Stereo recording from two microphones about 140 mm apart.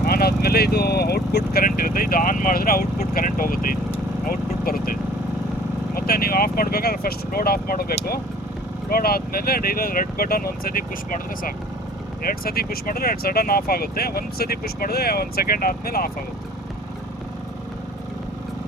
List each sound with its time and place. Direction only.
0.0 s vehicle: 90° left
1.5 s speech: 90° left
12.3 s speech: 90° left